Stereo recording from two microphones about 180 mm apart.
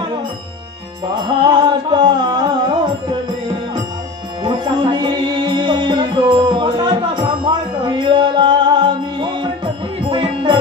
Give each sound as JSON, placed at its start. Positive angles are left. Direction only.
{"t": 1.1, "sound": "music", "side_deg": -25}
{"t": 4.4, "sound": "music", "side_deg": -25}